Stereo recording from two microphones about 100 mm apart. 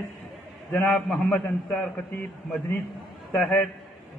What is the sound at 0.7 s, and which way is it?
A man's voice, 15° left (ahead or behind).